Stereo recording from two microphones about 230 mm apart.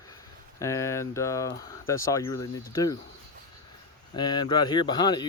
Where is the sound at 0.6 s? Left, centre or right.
Centre.